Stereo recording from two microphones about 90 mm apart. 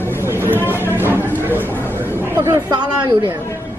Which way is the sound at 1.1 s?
25° right (ahead or behind).